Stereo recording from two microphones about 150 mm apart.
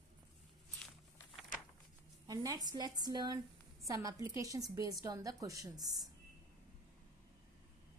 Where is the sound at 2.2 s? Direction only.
25° right (ahead or behind).